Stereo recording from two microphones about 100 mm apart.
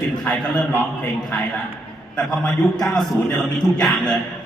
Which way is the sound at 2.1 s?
10° left (ahead or behind).